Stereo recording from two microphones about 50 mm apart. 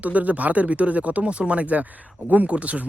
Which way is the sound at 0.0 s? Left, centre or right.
Right.